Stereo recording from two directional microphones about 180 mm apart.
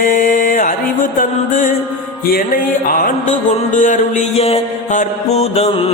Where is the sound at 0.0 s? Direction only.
50° left (ahead or behind).